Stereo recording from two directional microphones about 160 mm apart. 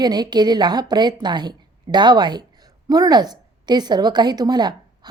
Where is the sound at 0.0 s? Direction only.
25° right (ahead or behind).